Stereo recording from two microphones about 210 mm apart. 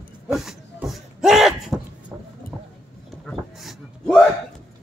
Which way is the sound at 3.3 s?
Centre (ahead or behind).